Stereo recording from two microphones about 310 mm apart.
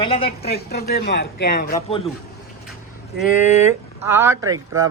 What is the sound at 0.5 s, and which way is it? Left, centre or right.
Speech, left.